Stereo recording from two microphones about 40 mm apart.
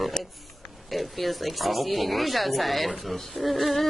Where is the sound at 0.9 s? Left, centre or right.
Centre.